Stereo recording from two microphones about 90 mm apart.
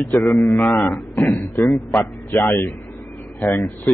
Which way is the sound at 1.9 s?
35° left (ahead or behind).